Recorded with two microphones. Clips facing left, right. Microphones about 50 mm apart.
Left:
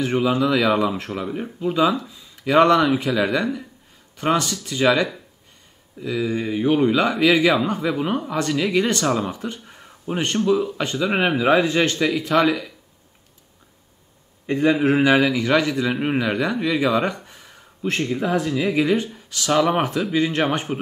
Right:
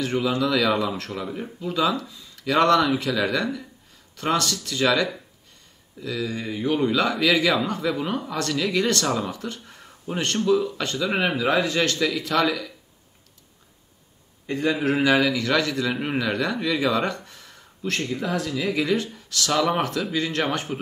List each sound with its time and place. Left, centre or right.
0.0 s speech: left
14.4 s speech: centre